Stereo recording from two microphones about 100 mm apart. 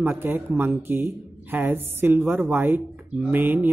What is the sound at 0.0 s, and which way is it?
Speech, 20° right (ahead or behind).